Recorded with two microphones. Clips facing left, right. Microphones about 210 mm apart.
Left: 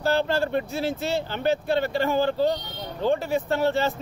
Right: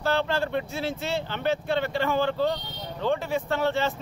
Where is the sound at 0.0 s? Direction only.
40° left (ahead or behind).